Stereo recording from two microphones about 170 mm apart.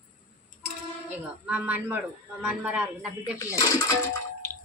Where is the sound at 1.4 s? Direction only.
10° right (ahead or behind).